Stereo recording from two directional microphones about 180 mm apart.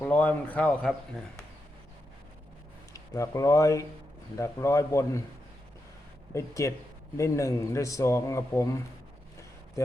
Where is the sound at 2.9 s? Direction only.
20° left (ahead or behind).